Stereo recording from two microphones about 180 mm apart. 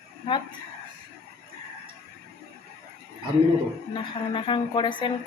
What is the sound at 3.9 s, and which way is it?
Speech, 30° left (ahead or behind).